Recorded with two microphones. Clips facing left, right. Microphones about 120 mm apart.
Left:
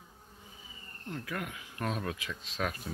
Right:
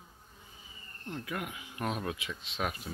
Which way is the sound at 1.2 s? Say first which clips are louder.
Even; 5° right (ahead or behind).